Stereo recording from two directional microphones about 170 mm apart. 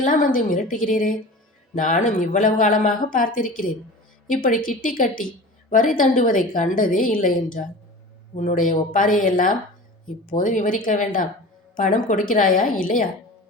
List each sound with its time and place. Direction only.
0.0 s a woman's voice: 55° left (ahead or behind)